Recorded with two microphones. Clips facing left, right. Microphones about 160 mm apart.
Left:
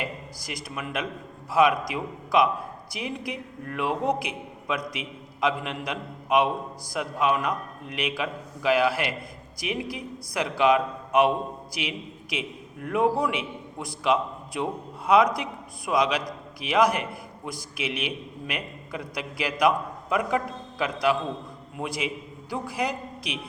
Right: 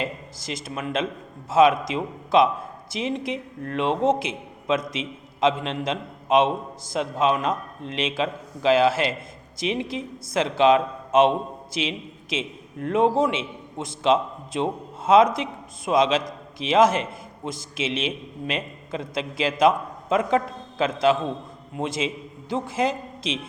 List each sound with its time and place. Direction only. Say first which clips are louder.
0.0 s a man's voice: right 3 dB; 25° right (ahead or behind)